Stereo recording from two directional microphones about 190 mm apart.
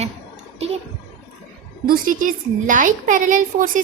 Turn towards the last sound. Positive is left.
turn(degrees=-40)  # may be behind; listen again after turning